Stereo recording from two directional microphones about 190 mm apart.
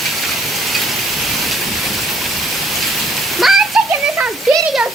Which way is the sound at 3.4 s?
Centre (ahead or behind).